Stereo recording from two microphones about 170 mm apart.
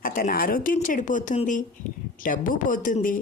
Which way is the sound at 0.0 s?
55° left (ahead or behind).